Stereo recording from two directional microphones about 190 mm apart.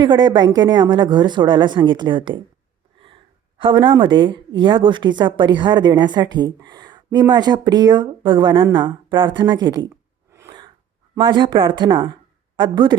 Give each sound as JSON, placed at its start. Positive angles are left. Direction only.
{"t": 0.0, "sound": "a woman's voice", "side_deg": -25}
{"t": 3.6, "sound": "a woman's voice", "side_deg": -25}
{"t": 9.9, "sound": "a sound", "side_deg": -15}
{"t": 11.2, "sound": "a woman's voice", "side_deg": -25}